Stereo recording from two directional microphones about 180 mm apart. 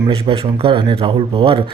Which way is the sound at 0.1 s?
30° right (ahead or behind).